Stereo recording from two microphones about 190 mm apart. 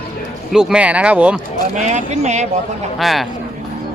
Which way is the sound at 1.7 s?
40° right (ahead or behind).